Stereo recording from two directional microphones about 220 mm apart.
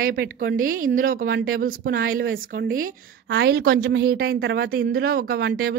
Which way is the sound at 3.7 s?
60° right (ahead or behind).